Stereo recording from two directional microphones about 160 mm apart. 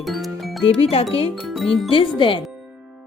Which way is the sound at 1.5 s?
Centre (ahead or behind).